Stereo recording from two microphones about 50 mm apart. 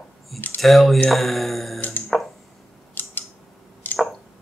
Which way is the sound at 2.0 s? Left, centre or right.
Centre.